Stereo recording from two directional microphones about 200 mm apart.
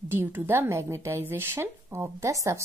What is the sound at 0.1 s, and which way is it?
A woman's voice, 10° right (ahead or behind).